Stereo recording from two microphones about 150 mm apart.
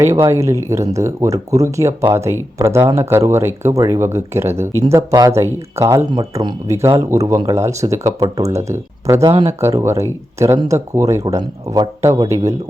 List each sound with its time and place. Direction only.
0.0 s speech: 20° right (ahead or behind)